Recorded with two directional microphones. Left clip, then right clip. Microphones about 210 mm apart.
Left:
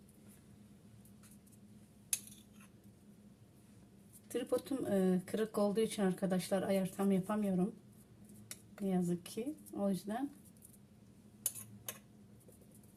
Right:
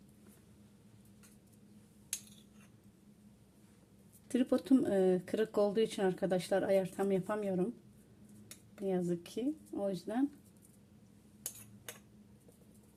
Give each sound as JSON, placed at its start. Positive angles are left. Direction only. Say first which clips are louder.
{"t": 4.3, "sound": "speech", "louder": "right 6 dB", "side_deg": -30}
{"t": 8.8, "sound": "speech", "louder": "right 3 dB", "side_deg": -25}